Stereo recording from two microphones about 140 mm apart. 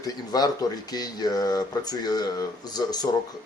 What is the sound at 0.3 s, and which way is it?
Speech, 30° left (ahead or behind).